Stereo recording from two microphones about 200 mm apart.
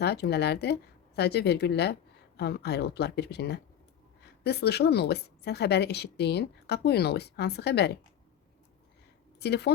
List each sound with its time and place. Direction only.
0.0 s a woman's voice: 55° left (ahead or behind)
9.4 s a woman's voice: 55° left (ahead or behind)